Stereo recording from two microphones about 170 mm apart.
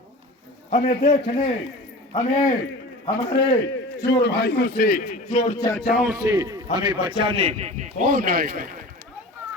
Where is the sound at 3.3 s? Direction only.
85° left; by 5.1 s 55° left (ahead or behind).